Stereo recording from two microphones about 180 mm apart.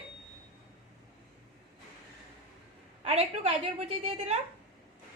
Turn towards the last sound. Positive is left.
turn(degrees=-30)  # may be behind; listen again after turning